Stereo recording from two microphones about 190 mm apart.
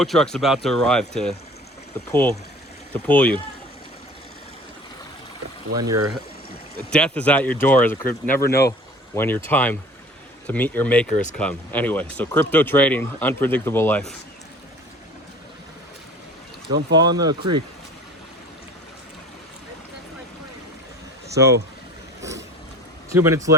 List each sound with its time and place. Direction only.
0.0 s speech: centre (ahead or behind)
5.7 s speech: 20° right (ahead or behind)
6.9 s speech: 5° left (ahead or behind)
16.7 s speech: 20° right (ahead or behind)
21.3 s speech: 15° right (ahead or behind)
23.0 s speech: 15° right (ahead or behind)